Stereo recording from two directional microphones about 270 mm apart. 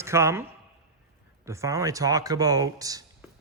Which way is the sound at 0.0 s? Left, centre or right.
Centre.